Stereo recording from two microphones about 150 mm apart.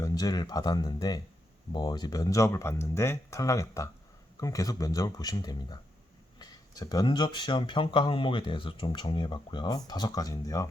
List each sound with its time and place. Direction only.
0.0 s speech: 25° left (ahead or behind)